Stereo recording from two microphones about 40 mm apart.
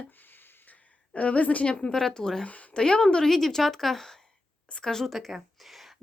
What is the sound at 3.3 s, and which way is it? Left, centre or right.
A woman's voice, centre.